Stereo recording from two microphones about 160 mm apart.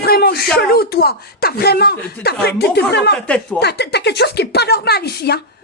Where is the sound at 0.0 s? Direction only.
80° left.